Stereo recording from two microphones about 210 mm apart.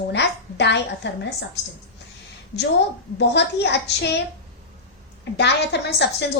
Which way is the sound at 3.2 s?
55° left (ahead or behind).